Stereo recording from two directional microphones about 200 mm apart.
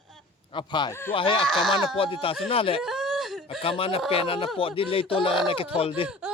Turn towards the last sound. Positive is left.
turn(degrees=30)  # may be behind; listen again after turning